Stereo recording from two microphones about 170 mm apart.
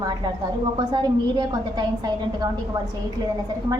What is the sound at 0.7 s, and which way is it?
A woman's voice, 25° right (ahead or behind).